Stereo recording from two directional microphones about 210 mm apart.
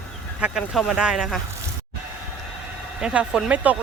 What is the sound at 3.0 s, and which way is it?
Speech, 5° right (ahead or behind).